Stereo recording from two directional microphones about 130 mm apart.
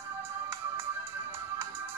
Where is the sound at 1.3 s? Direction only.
20° right (ahead or behind).